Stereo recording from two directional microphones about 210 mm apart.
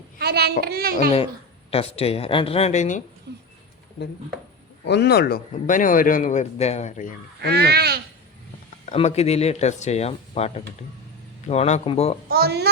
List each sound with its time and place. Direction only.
0.2 s a child's voice: 50° right (ahead or behind)
1.7 s speech: 30° left (ahead or behind)
4.9 s speech: 50° left (ahead or behind)
7.4 s speech: 50° right (ahead or behind)
8.9 s speech: 30° left (ahead or behind)
12.3 s speech: 50° right (ahead or behind)